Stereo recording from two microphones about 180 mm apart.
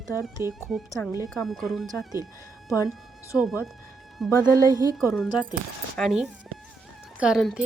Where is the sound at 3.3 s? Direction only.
10° right (ahead or behind).